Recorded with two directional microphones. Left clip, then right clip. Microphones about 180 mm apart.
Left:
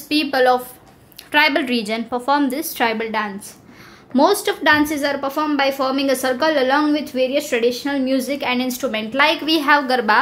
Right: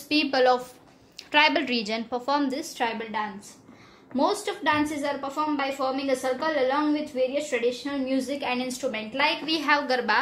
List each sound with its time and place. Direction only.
0.1 s a sound: centre (ahead or behind)
1.3 s a woman's voice: centre (ahead or behind)
8.9 s a woman's voice: 35° left (ahead or behind)